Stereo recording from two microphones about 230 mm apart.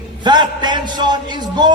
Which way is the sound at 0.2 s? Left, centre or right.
Centre.